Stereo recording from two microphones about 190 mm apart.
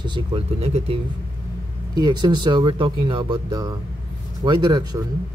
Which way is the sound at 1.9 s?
20° right (ahead or behind).